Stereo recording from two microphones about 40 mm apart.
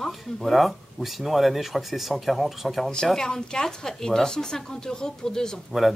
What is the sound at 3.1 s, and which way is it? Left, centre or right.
A woman's voice, centre.